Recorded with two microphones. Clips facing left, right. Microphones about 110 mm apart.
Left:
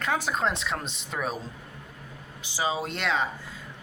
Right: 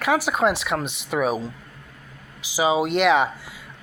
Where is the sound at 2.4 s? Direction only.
90° right.